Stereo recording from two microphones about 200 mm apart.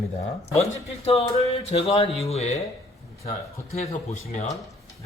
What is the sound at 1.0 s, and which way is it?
Speech, 30° left (ahead or behind).